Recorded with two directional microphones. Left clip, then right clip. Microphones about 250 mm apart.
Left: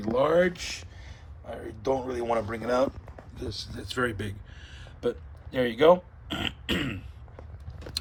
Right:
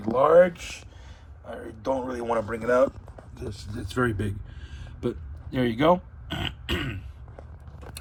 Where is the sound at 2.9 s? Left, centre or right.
Left.